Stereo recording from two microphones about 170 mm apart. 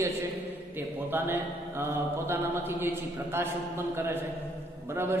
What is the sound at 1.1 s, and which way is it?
Speech, 15° right (ahead or behind).